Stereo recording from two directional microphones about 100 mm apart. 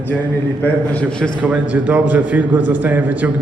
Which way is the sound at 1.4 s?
15° right (ahead or behind).